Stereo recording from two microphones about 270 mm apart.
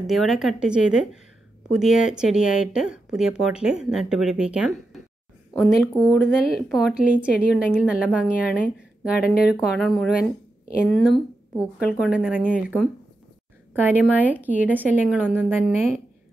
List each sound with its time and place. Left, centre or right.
0.0 s speech: centre
9.2 s speech: left
9.8 s speech: centre